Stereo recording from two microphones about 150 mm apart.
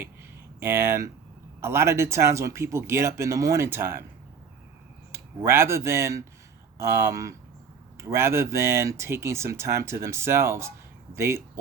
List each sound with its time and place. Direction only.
0.6 s speech: 15° right (ahead or behind)
5.1 s speech: 15° right (ahead or behind)